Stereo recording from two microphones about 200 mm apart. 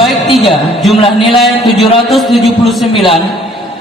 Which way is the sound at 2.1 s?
Centre (ahead or behind).